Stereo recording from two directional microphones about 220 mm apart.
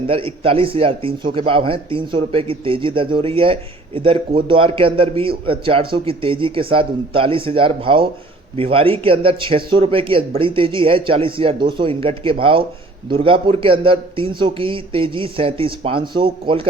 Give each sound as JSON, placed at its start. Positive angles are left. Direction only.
{"t": 0.1, "sound": "a man's voice", "side_deg": -25}